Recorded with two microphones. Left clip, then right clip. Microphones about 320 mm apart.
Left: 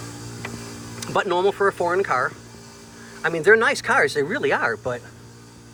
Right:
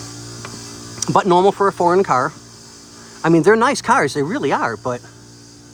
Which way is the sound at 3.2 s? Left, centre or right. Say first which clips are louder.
Right 4 dB; right.